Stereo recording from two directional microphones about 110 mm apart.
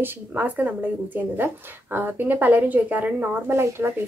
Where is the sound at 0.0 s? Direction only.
15° right (ahead or behind).